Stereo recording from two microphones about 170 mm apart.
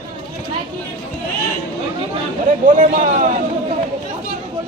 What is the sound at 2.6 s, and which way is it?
Speech, 50° right (ahead or behind).